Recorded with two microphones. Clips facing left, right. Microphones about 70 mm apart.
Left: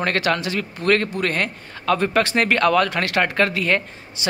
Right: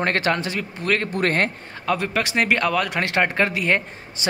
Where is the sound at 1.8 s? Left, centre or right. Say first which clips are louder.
Left 4 dB; centre.